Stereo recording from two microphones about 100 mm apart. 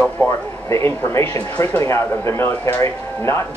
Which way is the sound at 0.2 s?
25° left (ahead or behind).